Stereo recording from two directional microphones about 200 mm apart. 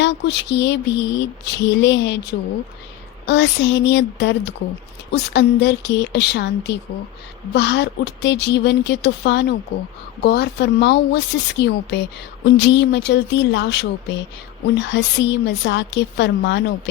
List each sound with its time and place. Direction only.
0.0 s mantra: 60° left (ahead or behind)
3.2 s mantra: 60° left (ahead or behind)